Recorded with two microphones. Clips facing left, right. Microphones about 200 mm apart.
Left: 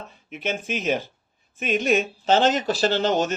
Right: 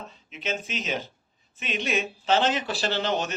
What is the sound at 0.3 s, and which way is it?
Speech, 55° left (ahead or behind).